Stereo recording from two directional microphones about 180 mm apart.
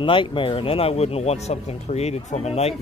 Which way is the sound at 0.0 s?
30° left (ahead or behind).